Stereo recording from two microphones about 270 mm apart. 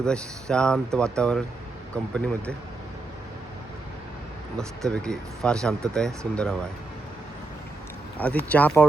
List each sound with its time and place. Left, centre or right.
0.0 s speech: centre
4.5 s speech: centre
8.2 s speech: centre